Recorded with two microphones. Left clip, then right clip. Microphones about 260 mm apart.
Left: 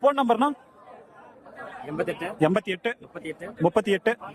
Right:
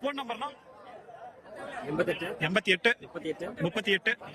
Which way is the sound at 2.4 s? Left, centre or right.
Centre.